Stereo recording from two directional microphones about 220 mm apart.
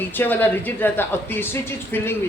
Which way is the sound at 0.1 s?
10° left (ahead or behind).